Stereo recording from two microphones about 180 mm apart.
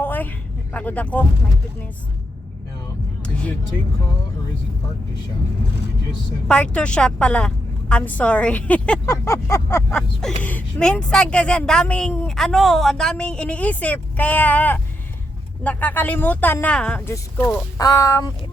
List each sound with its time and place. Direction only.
0.0 s a sound: 10° left (ahead or behind)
3.2 s music: 5° left (ahead or behind)
6.5 s a woman's voice: 5° left (ahead or behind)
17.7 s speech: 20° left (ahead or behind)